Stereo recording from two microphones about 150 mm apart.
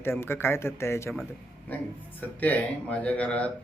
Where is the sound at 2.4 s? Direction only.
10° left (ahead or behind).